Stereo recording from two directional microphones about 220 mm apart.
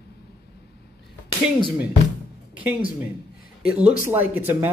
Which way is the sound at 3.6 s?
5° right (ahead or behind).